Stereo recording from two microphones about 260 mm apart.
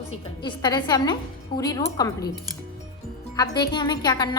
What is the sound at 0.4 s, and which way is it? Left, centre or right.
A woman's voice, centre.